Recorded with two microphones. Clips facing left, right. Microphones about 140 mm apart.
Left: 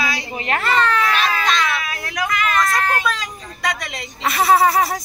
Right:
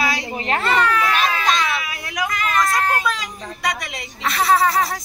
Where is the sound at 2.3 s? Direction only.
40° right (ahead or behind).